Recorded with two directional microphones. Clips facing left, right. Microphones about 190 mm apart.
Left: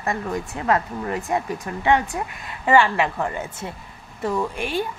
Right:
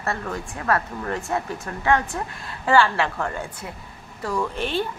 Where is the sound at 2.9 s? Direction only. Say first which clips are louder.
Left 2 dB; 10° left (ahead or behind).